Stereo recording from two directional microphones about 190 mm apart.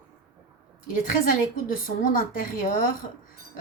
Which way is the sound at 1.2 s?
45° left (ahead or behind).